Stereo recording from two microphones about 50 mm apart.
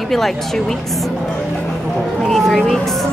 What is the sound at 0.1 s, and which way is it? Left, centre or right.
Speech, centre.